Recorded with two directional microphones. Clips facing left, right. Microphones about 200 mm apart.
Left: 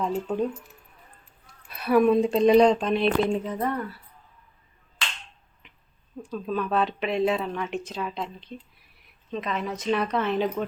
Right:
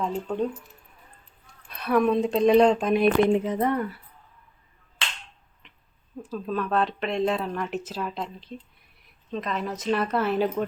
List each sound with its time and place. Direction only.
0.0 s speech: 5° left (ahead or behind)
1.6 s speech: 5° left (ahead or behind)
3.2 s speech: 20° right (ahead or behind)
5.6 s a sound: 5° left (ahead or behind)
6.2 s speech: centre (ahead or behind)